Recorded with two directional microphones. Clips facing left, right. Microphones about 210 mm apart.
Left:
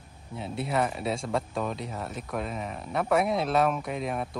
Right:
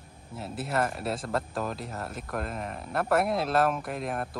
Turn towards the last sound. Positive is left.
turn(degrees=0)  # may be behind; listen again after turning